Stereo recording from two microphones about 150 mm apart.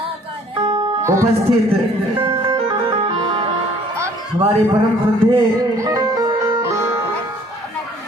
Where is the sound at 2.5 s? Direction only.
40° right (ahead or behind).